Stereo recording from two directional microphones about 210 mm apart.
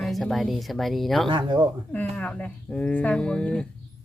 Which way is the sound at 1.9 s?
5° left (ahead or behind).